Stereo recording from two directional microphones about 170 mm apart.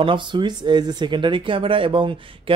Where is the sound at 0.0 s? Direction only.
30° right (ahead or behind).